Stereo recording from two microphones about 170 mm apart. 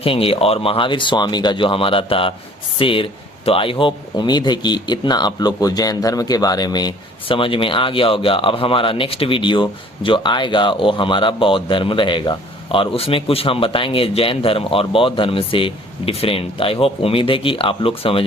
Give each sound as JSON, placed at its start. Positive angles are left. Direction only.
{"t": 0.0, "sound": "speech", "side_deg": 35}